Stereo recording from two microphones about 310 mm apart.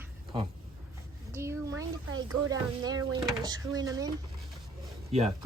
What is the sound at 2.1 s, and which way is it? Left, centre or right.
Speech, centre.